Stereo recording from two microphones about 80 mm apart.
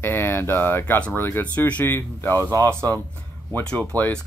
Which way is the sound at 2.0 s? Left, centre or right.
Left.